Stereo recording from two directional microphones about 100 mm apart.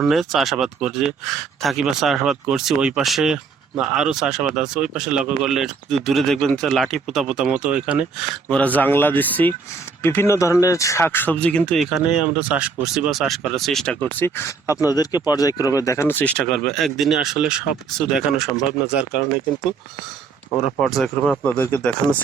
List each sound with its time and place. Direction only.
0.0 s speech: centre (ahead or behind)
8.4 s speech: 15° left (ahead or behind)
12.0 s speech: 10° right (ahead or behind); by 14.3 s 10° left (ahead or behind)
14.3 s speech: 25° left (ahead or behind)
16.4 s speech: 5° left (ahead or behind)
20.8 s speech: centre (ahead or behind)
21.4 s speech: 15° left (ahead or behind)